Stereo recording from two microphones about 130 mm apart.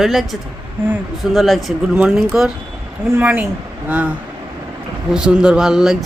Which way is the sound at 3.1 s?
15° right (ahead or behind).